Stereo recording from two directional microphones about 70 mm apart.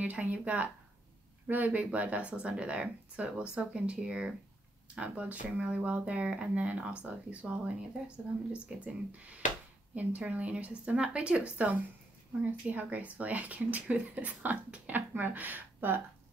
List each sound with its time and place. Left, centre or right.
0.0 s speech: right